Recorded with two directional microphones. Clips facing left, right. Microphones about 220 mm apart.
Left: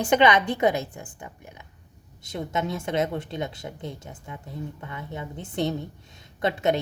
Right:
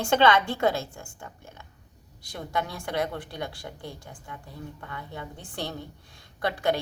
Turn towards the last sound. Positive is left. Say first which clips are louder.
# left 3 dB
turn(degrees=20)  # may be behind; listen again after turning